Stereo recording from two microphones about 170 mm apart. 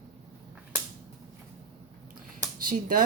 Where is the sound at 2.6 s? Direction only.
55° right (ahead or behind).